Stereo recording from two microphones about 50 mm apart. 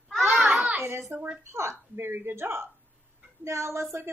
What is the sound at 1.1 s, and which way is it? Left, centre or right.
Speech, right.